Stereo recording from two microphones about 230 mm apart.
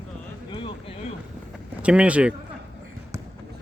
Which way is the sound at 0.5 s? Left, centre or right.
Left.